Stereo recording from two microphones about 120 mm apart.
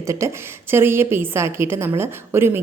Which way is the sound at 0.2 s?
25° right (ahead or behind).